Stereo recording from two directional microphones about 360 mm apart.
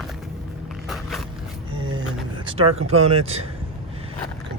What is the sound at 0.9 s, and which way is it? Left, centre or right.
Biting, centre.